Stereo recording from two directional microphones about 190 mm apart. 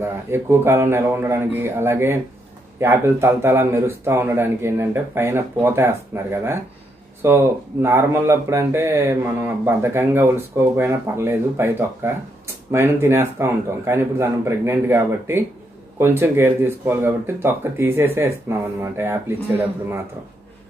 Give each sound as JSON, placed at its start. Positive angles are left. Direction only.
{"t": 0.0, "sound": "speech", "side_deg": -15}